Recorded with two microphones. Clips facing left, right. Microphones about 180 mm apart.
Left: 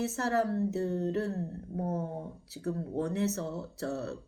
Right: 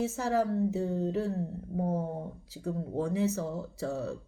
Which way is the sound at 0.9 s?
10° right (ahead or behind).